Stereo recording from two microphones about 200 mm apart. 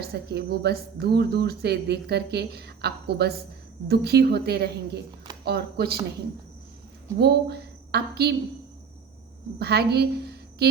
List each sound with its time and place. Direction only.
0.0 s speech: 50° right (ahead or behind)
7.2 s a woman's voice: 55° right (ahead or behind)
9.6 s a woman's voice: 55° right (ahead or behind)